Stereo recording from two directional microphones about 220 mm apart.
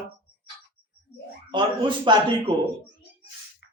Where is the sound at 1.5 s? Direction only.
20° right (ahead or behind).